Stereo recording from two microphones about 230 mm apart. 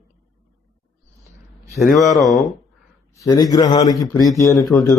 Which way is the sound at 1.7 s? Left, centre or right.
Centre.